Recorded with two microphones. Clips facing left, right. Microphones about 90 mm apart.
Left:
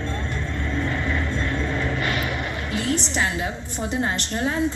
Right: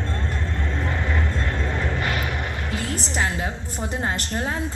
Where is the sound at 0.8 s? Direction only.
40° right (ahead or behind).